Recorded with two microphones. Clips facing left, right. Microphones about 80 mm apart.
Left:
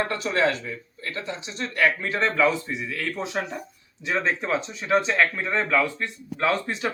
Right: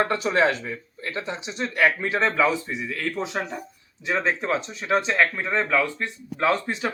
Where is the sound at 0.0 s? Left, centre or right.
Right.